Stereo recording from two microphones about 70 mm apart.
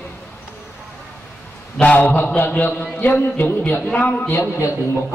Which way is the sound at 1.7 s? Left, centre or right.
Left.